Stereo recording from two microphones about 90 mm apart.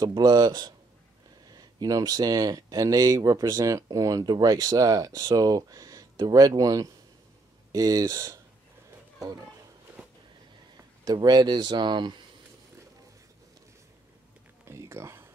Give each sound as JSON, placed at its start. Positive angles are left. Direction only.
{"t": 0.0, "sound": "speech", "side_deg": -50}
{"t": 11.1, "sound": "speech", "side_deg": -50}
{"t": 14.7, "sound": "speech", "side_deg": -30}